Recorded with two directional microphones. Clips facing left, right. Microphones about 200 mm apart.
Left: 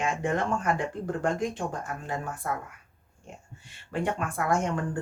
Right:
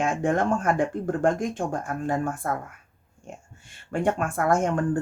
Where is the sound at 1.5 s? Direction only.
50° right (ahead or behind).